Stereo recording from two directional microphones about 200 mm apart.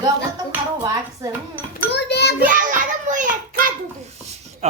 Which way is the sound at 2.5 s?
40° right (ahead or behind).